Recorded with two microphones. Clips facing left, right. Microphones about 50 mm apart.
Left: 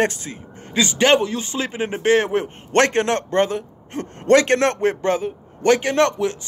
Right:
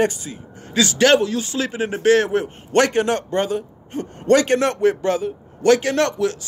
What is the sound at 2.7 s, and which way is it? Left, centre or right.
A man's voice, left.